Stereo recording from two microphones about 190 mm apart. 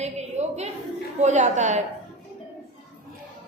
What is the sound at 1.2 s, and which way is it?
Speech, 40° right (ahead or behind).